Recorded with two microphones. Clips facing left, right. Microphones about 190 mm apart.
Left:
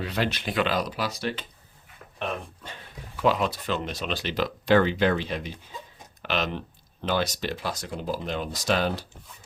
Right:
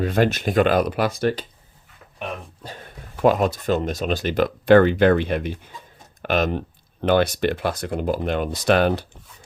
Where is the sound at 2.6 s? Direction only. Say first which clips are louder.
Right 5 dB; 40° right (ahead or behind).